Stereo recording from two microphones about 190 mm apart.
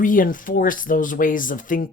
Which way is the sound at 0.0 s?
45° left (ahead or behind).